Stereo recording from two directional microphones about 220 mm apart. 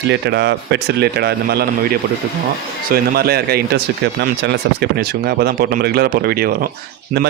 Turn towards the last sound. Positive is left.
turn(degrees=-45)  # may be behind; listen again after turning